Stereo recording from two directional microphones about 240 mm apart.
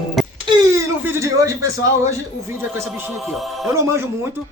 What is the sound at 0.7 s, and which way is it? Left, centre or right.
Speech, centre.